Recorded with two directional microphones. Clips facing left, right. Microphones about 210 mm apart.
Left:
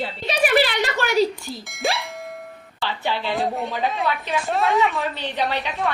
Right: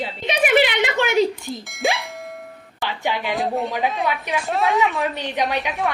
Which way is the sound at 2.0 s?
Centre (ahead or behind).